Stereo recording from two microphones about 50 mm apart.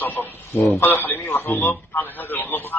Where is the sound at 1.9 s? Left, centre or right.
Left.